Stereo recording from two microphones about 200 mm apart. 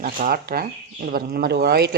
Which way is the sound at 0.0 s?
45° right (ahead or behind).